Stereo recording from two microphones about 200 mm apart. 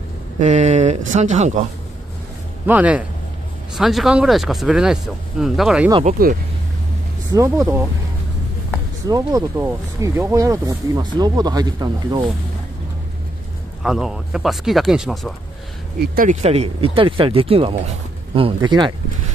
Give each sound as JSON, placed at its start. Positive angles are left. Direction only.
{"t": 0.4, "sound": "speech", "side_deg": -35}
{"t": 2.6, "sound": "a man's voice", "side_deg": -5}
{"t": 6.0, "sound": "speech", "side_deg": -45}
{"t": 7.3, "sound": "a man's voice", "side_deg": -15}
{"t": 9.1, "sound": "speech", "side_deg": -15}
{"t": 13.8, "sound": "speech", "side_deg": -5}
{"t": 16.0, "sound": "speech", "side_deg": -45}
{"t": 16.4, "sound": "speech", "side_deg": -30}